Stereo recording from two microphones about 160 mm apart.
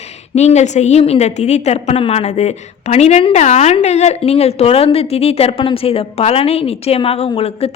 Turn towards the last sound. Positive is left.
turn(degrees=40)  # may be behind; listen again after turning